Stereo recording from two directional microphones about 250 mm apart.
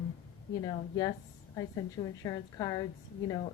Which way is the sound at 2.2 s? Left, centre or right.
Centre.